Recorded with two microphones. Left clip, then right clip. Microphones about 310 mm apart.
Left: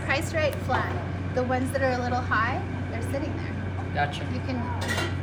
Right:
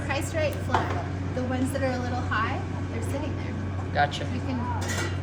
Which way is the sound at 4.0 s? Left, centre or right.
Centre.